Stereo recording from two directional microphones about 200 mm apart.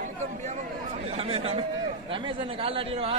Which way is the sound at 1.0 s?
30° right (ahead or behind).